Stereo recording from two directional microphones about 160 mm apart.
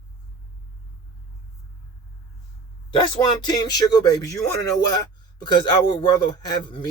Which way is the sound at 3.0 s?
25° left (ahead or behind).